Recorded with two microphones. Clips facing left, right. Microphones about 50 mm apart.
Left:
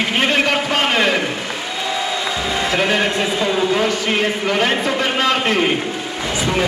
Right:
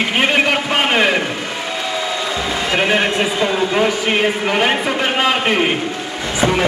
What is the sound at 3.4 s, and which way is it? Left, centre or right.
A man's voice, centre.